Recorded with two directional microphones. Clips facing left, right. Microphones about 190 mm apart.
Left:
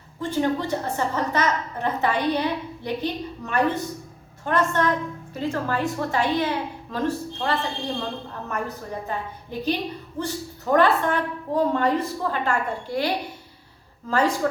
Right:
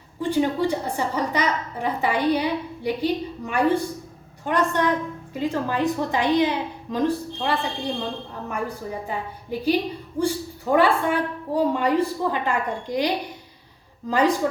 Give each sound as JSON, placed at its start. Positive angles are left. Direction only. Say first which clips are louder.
{"t": 0.2, "sound": "a woman's voice", "louder": "right 2 dB", "side_deg": -15}